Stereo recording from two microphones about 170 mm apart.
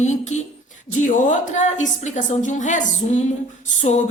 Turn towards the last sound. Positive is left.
turn(degrees=45)  # may be behind; listen again after turning